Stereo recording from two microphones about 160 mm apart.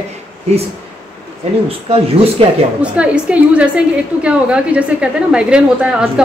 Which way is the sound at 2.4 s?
35° right (ahead or behind).